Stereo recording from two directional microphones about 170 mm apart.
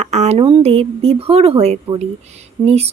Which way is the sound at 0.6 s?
35° right (ahead or behind).